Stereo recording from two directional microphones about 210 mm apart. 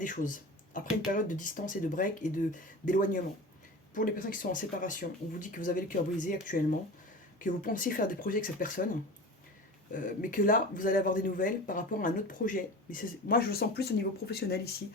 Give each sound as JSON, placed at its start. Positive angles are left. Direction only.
{"t": 0.0, "sound": "speech", "side_deg": 40}
{"t": 9.9, "sound": "speech", "side_deg": 40}